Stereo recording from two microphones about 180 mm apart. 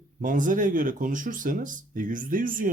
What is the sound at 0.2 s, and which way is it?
Speech, 50° right (ahead or behind).